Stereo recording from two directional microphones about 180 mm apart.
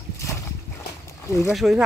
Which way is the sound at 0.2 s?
15° left (ahead or behind).